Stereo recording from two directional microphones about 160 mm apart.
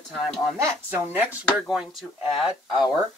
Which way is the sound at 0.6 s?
15° right (ahead or behind).